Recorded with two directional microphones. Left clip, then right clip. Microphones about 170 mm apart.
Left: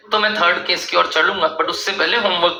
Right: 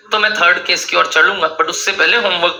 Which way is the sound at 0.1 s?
15° right (ahead or behind).